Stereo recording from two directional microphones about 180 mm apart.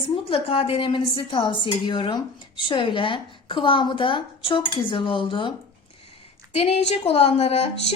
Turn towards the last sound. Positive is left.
turn(degrees=35)  # may be behind; listen again after turning